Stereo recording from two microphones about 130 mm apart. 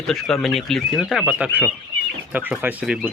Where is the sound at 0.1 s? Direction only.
Centre (ahead or behind).